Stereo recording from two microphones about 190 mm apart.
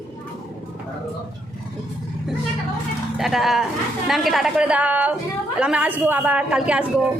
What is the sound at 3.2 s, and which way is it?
A woman's voice, centre (ahead or behind).